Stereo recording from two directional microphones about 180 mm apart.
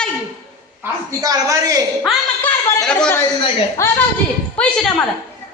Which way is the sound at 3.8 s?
15° left (ahead or behind).